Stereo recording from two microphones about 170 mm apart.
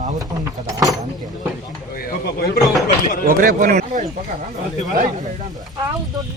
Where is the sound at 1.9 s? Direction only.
65° left (ahead or behind).